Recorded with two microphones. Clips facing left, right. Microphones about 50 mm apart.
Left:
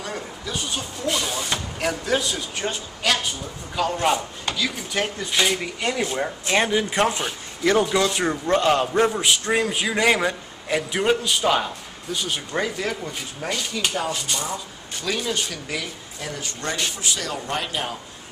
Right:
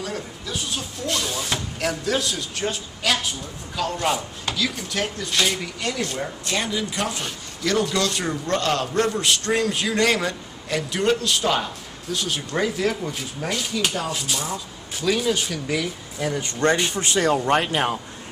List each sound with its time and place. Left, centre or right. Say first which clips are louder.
0.0 s a man's voice: even; centre
6.5 s speech: left 6 dB; left
7.2 s a man's voice: left 3 dB; centre
16.9 s speech: right 7 dB; right